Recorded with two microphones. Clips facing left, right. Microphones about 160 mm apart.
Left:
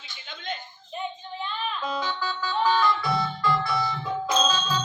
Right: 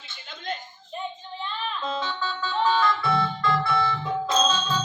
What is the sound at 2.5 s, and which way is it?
Music, centre (ahead or behind).